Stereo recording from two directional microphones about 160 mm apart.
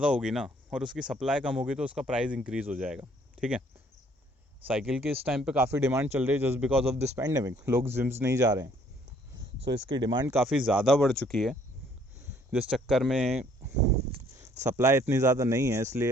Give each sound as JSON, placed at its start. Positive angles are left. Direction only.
{"t": 0.0, "sound": "speech", "side_deg": -5}
{"t": 3.0, "sound": "cricket", "side_deg": -10}
{"t": 4.7, "sound": "speech", "side_deg": -5}
{"t": 5.5, "sound": "speech", "side_deg": -15}
{"t": 10.2, "sound": "speech", "side_deg": -5}
{"t": 12.3, "sound": "speech", "side_deg": -10}
{"t": 14.6, "sound": "speech", "side_deg": -15}